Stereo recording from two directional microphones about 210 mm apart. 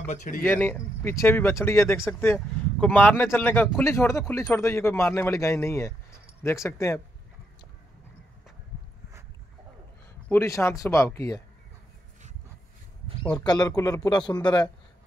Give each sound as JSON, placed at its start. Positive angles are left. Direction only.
{"t": 0.0, "sound": "speech", "side_deg": 35}
{"t": 0.4, "sound": "speech", "side_deg": 10}
{"t": 10.2, "sound": "speech", "side_deg": 10}
{"t": 13.4, "sound": "a man's voice", "side_deg": 20}